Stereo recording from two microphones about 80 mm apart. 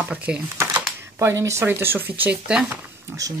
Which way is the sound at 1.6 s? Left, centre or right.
Right.